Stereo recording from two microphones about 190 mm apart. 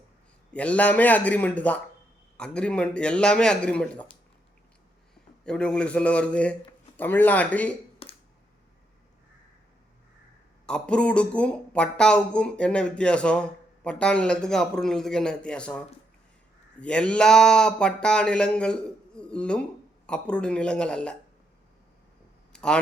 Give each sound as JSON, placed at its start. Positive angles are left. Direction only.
{"t": 0.5, "sound": "a man's voice", "side_deg": 5}
{"t": 5.5, "sound": "a man's voice", "side_deg": 5}
{"t": 8.0, "sound": "a sound", "side_deg": 30}
{"t": 10.7, "sound": "speech", "side_deg": 5}
{"t": 16.8, "sound": "speech", "side_deg": 5}
{"t": 22.5, "sound": "speech", "side_deg": 5}